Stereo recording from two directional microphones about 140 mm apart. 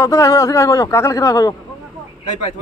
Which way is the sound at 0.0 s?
25° left (ahead or behind).